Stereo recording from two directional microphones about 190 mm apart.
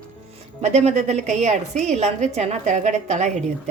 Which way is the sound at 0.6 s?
35° right (ahead or behind).